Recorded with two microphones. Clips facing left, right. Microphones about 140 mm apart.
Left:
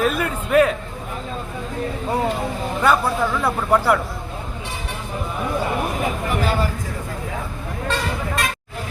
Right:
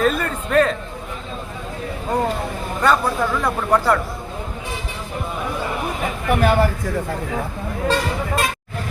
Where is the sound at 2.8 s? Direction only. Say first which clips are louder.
Even; 5° left (ahead or behind).